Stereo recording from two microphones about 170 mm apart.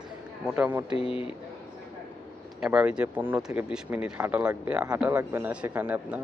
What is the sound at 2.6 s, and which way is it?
Speech, 5° right (ahead or behind).